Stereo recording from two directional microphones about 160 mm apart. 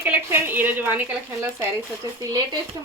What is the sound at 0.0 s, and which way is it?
Speech, 15° right (ahead or behind).